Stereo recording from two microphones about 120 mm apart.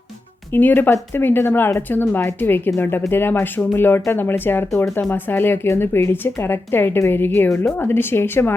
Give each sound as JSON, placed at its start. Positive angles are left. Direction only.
{"t": 0.5, "sound": "speech", "side_deg": 15}